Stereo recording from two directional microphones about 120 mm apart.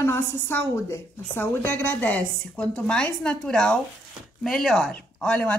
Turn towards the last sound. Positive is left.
turn(degrees=10)  # may be behind; listen again after turning